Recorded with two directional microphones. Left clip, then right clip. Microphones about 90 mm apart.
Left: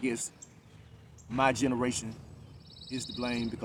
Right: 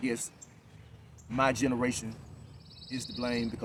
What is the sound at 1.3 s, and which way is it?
Speech, centre (ahead or behind).